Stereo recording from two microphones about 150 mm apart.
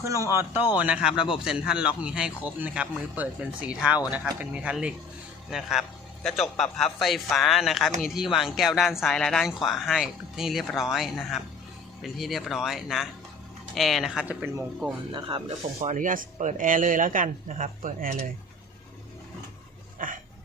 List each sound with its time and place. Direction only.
0.0 s a man's voice: 20° right (ahead or behind); by 14.3 s 5° right (ahead or behind)
15.4 s speech: 55° right (ahead or behind)
20.0 s speech: 65° right (ahead or behind)